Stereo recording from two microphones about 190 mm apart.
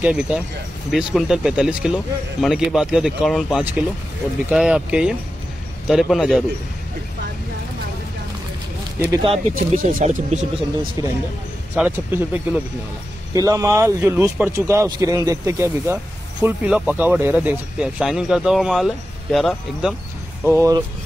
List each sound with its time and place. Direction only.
0.0 s speech: 5° right (ahead or behind)
9.2 s speech: 30° right (ahead or behind)
9.8 s speech: 45° right (ahead or behind)
11.7 s speech: 10° right (ahead or behind)
20.4 s speech: 15° right (ahead or behind)